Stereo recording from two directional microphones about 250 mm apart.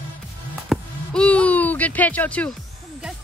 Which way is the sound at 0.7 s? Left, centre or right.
Centre.